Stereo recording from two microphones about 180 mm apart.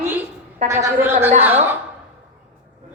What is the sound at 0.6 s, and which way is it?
Speech, 15° right (ahead or behind).